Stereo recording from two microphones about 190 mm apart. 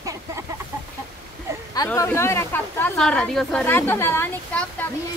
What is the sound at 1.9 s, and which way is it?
A woman's voice, 10° left (ahead or behind).